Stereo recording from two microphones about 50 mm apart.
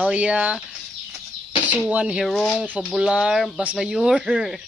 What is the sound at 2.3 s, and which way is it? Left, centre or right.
Speech, centre.